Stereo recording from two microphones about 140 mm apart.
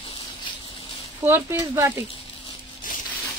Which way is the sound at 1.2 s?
15° right (ahead or behind).